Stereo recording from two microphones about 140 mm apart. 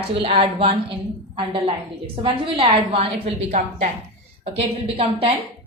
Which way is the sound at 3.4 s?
60° right (ahead or behind).